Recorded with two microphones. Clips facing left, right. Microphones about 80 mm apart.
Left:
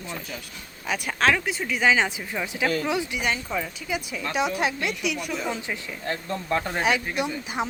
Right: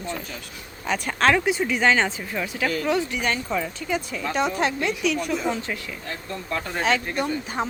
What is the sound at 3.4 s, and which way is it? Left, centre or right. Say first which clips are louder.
Speech: right 3 dB; centre.